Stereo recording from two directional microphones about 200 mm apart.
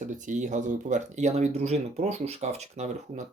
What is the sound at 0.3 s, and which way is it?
Speech, 40° right (ahead or behind).